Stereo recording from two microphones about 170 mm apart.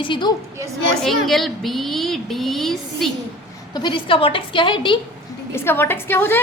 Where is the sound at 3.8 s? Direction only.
30° left (ahead or behind).